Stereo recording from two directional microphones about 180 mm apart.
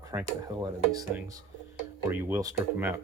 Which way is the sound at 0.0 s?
15° right (ahead or behind).